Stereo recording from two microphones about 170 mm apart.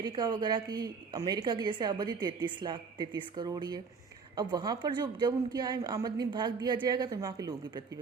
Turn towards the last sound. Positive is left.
turn(degrees=-20)  # may be behind; listen again after turning